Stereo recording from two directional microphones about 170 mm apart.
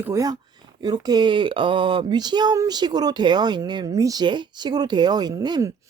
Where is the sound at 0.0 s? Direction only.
20° right (ahead or behind).